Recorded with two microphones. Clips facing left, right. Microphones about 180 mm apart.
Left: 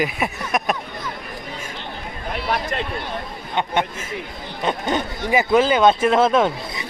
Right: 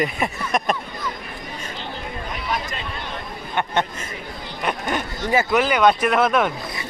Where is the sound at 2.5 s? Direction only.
60° left (ahead or behind).